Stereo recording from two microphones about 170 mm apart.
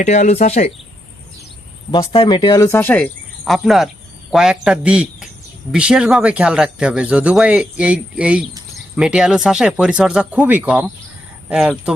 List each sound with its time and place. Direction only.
0.0 s speech: 45° left (ahead or behind)
1.9 s speech: 30° left (ahead or behind); by 11.9 s centre (ahead or behind)